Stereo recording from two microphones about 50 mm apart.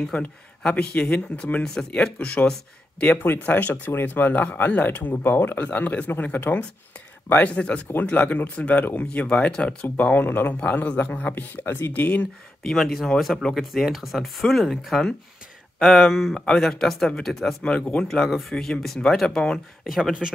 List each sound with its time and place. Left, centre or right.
0.1 s speech: left
1.6 s speech: centre
2.1 s speech: left
5.6 s speech: left
7.5 s speech: left
10.1 s speech: left
11.9 s speech: left
12.6 s speech: centre
16.1 s speech: centre
16.3 s speech: centre
17.6 s speech: left
18.0 s speech: centre
19.8 s speech: centre